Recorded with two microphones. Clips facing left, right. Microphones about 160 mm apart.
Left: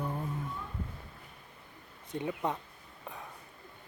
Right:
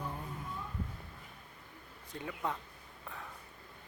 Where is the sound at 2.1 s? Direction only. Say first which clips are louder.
Left 5 dB; 20° left (ahead or behind).